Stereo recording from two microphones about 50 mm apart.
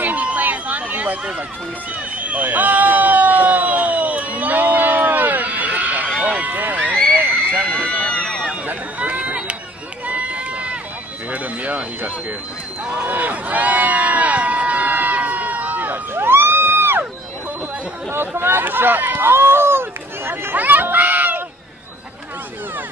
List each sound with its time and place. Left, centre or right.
0.0 s a sound: right
6.2 s run: right
7.2 s a sound: left
8.6 s run: right
11.3 s speech: right
13.0 s run: right
16.2 s music: right
18.1 s speech: right
20.5 s a sound: right